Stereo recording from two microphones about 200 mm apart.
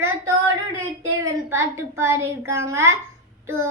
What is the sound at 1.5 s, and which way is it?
Child singing, 15° right (ahead or behind).